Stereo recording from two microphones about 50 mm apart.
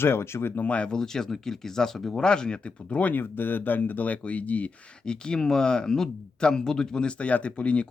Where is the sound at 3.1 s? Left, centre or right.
Left.